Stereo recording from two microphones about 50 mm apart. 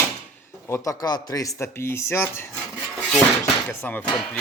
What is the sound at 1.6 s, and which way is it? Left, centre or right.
Speech, left.